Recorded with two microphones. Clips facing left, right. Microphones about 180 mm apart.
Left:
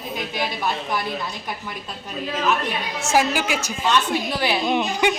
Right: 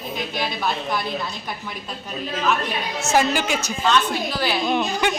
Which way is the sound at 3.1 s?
5° left (ahead or behind).